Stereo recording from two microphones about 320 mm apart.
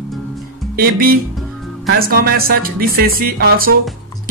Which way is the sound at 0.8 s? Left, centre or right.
Right.